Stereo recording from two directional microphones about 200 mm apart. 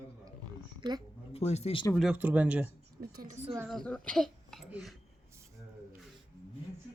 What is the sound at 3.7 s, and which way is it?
Speech, 5° left (ahead or behind).